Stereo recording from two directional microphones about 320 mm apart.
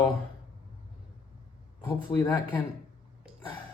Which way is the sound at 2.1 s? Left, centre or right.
Centre.